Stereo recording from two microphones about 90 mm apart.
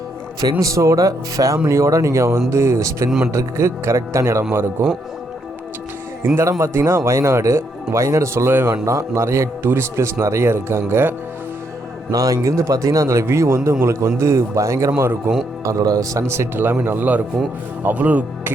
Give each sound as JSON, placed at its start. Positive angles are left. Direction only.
{"t": 0.6, "sound": "a man's voice", "side_deg": -35}
{"t": 6.3, "sound": "a man's voice", "side_deg": -30}
{"t": 12.1, "sound": "a man's voice", "side_deg": -40}
{"t": 15.6, "sound": "a man's voice", "side_deg": -40}